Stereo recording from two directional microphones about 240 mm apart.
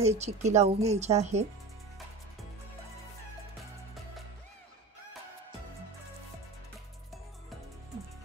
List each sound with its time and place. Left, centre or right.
0.0 s a woman's voice: right